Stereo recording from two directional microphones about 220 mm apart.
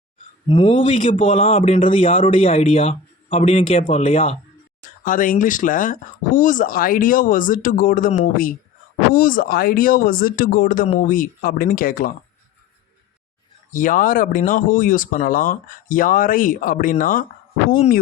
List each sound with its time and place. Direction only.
0.4 s speech: 25° left (ahead or behind)
0.9 s speech: 35° left (ahead or behind)
13.7 s speech: 35° left (ahead or behind)